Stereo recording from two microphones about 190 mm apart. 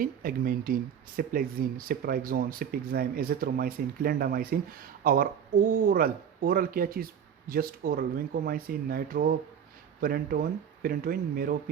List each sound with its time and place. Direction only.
0.0 s speech: 50° right (ahead or behind)